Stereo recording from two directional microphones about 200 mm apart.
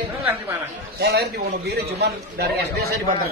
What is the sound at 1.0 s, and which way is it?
A man's voice, 55° right (ahead or behind).